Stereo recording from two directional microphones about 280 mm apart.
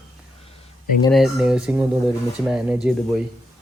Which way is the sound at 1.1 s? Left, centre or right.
Centre.